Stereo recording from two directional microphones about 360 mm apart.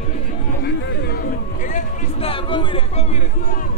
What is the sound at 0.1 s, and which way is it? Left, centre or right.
Chatter, left.